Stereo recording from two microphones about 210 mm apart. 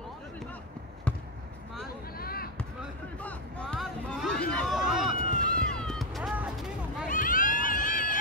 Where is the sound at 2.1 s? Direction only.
45° left (ahead or behind).